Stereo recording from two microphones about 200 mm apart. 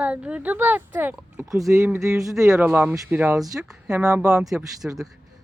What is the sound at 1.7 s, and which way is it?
Speech, 15° right (ahead or behind).